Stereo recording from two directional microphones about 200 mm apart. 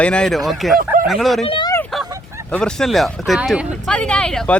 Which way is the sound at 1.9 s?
Centre (ahead or behind).